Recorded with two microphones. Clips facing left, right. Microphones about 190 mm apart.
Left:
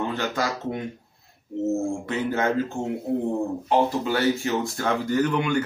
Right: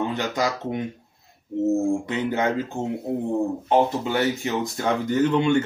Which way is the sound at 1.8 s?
15° right (ahead or behind).